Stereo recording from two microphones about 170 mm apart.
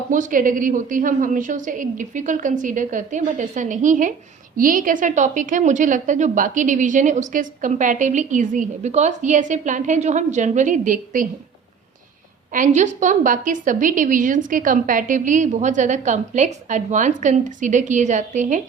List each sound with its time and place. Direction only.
0.1 s a woman's voice: 50° right (ahead or behind)
12.5 s a woman's voice: 45° right (ahead or behind)